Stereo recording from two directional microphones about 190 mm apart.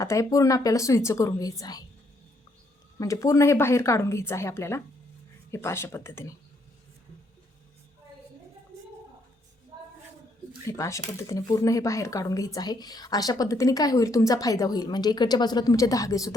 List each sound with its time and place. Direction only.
0.0 s speech: 15° left (ahead or behind)
3.0 s speech: 15° left (ahead or behind)
10.7 s speech: 15° left (ahead or behind)